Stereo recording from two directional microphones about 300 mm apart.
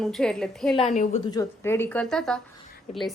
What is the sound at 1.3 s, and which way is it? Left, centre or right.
A woman's voice, centre.